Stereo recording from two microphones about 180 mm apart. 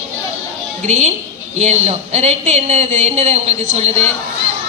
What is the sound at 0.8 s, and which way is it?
A woman's voice, 40° right (ahead or behind).